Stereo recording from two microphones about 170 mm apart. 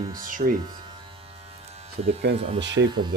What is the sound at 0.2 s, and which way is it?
Speech, 50° right (ahead or behind).